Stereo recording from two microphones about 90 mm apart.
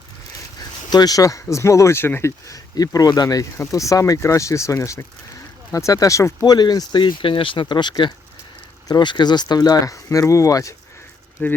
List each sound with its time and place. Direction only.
0.9 s speech: 45° left (ahead or behind); by 2.3 s 25° left (ahead or behind)
2.5 s speech: 45° left (ahead or behind)
11.4 s speech: 25° left (ahead or behind)